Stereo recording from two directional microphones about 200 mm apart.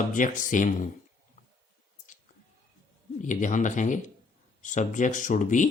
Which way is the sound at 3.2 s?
40° left (ahead or behind).